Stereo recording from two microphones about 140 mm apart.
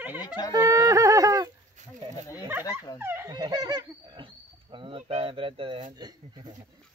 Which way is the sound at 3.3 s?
30° right (ahead or behind).